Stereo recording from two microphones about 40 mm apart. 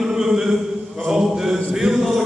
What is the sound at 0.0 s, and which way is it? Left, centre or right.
Mantra, centre.